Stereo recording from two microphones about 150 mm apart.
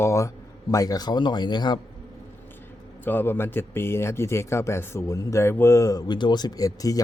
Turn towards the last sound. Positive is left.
turn(degrees=25)  # may be behind; listen again after turning